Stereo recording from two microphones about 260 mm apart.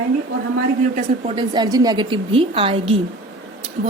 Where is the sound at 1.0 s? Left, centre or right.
Centre.